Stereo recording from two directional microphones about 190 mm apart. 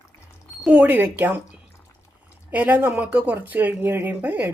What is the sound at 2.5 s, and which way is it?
Speech, 10° right (ahead or behind).